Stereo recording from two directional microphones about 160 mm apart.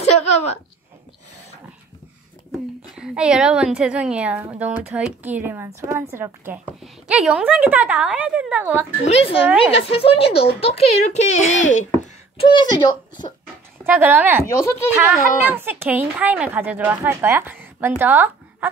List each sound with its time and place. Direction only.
0.0 s a sound: 40° left (ahead or behind)
3.0 s a woman's voice: 5° right (ahead or behind)
9.0 s a woman's voice: 40° left (ahead or behind)
12.4 s speech: 30° left (ahead or behind)
13.8 s a woman's voice: 15° right (ahead or behind)
14.4 s speech: 20° left (ahead or behind)
15.4 s a woman's voice: 10° right (ahead or behind)